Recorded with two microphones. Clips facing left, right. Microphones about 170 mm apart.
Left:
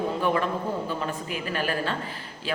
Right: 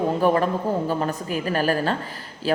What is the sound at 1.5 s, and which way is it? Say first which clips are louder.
Speech: right 6 dB; 40° right (ahead or behind).